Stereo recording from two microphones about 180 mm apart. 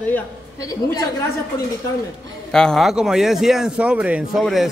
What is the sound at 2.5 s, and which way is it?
Speech, 5° left (ahead or behind).